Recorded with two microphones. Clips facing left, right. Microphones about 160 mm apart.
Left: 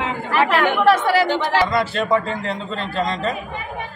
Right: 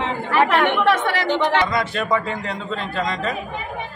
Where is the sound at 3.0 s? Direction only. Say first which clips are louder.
Left 3 dB; 25° left (ahead or behind).